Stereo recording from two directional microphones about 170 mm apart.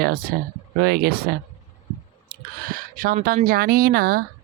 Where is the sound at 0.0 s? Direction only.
60° right (ahead or behind).